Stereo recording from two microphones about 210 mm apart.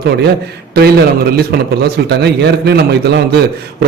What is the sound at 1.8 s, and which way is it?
A man's voice, 50° right (ahead or behind).